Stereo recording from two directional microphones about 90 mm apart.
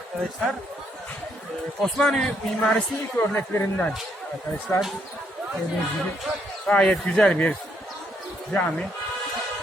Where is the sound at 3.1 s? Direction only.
25° left (ahead or behind).